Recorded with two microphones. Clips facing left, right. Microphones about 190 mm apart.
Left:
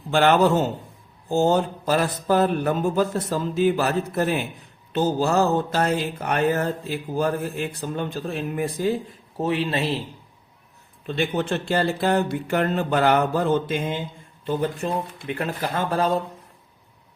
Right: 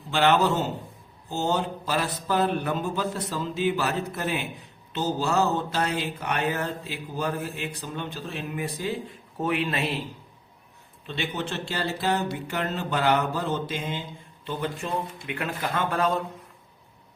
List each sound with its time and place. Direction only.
0.1 s mantra: 50° left (ahead or behind)
9.4 s speech: 30° left (ahead or behind)
11.0 s mantra: 45° left (ahead or behind)
14.4 s mantra: 40° left (ahead or behind)
15.3 s speech: 35° left (ahead or behind)